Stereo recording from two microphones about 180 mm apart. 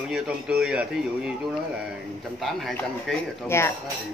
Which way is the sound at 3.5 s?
15° left (ahead or behind).